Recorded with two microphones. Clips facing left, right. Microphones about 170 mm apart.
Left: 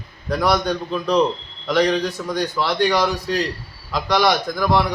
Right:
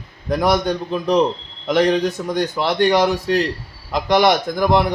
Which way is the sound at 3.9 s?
20° right (ahead or behind).